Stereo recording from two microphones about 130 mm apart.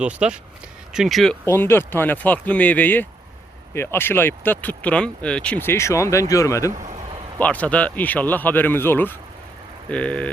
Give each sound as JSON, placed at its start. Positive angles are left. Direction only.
{"t": 0.0, "sound": "speech", "side_deg": -10}
{"t": 1.5, "sound": "speech", "side_deg": 20}
{"t": 7.3, "sound": "speech", "side_deg": 10}